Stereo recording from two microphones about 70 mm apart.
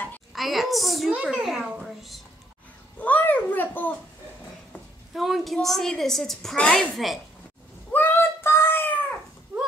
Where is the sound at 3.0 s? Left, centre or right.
Left.